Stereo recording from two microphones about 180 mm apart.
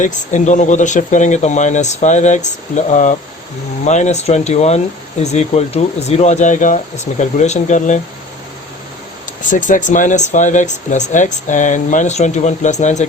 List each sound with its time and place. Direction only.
0.0 s speech: 40° left (ahead or behind)
9.5 s speech: 45° left (ahead or behind)